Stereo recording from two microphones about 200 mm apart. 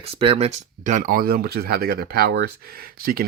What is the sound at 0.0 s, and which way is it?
Speech, 30° right (ahead or behind).